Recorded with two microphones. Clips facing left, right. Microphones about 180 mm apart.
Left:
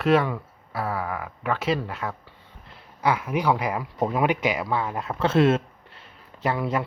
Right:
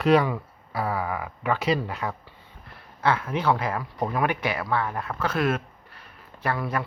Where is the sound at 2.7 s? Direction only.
10° left (ahead or behind).